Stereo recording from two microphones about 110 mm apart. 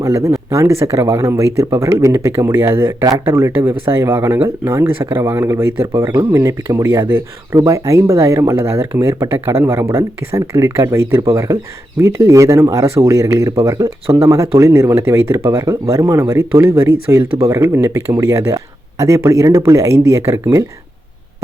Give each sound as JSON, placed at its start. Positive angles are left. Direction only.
{"t": 0.0, "sound": "speech", "side_deg": -30}
{"t": 18.2, "sound": "speech", "side_deg": -30}